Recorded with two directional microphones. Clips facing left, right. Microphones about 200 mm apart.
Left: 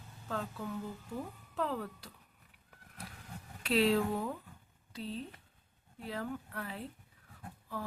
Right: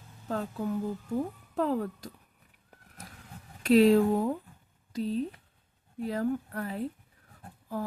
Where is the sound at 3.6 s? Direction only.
45° right (ahead or behind).